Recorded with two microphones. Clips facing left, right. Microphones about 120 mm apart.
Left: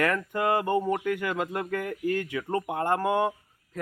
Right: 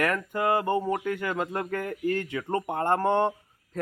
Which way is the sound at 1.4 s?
25° right (ahead or behind).